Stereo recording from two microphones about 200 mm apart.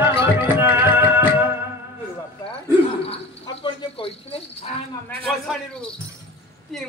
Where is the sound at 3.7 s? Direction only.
30° left (ahead or behind).